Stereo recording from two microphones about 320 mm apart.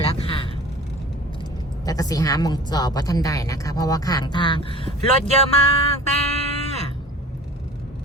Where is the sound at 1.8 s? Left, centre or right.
Centre.